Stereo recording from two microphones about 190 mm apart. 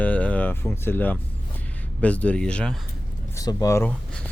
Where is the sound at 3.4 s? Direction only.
15° left (ahead or behind).